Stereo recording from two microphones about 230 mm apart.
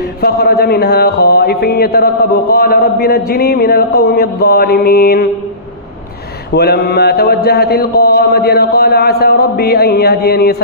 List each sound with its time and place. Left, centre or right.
0.0 s mantra: left
6.5 s mantra: left